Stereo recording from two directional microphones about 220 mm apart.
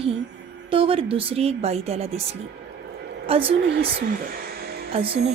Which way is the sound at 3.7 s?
45° right (ahead or behind).